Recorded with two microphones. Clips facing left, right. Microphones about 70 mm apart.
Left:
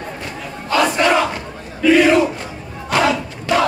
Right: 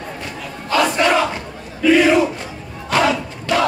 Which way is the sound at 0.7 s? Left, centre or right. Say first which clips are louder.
Left 1 dB; centre.